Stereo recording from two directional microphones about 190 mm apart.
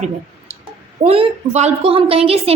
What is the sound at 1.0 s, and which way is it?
A woman's voice, 30° right (ahead or behind).